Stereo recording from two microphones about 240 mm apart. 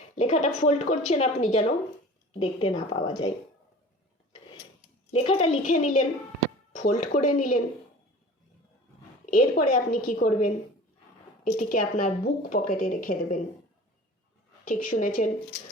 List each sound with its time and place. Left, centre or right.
0.2 s speech: left
5.1 s speech: left
9.3 s speech: left
14.6 s speech: left